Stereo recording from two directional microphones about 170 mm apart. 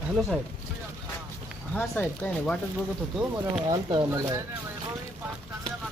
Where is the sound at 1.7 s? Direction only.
10° left (ahead or behind).